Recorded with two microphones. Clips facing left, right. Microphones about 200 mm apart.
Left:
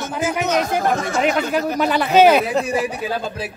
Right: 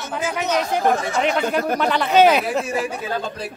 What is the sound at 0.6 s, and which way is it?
Speech, 45° left (ahead or behind).